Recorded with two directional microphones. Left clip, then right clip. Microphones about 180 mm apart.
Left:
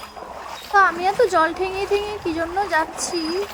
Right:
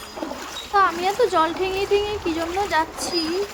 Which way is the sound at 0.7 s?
20° left (ahead or behind).